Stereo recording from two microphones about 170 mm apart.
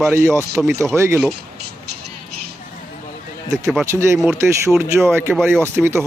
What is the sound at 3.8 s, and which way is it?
Speech, 15° right (ahead or behind).